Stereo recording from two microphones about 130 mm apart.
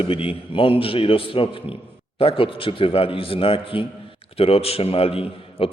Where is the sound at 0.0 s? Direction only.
45° left (ahead or behind).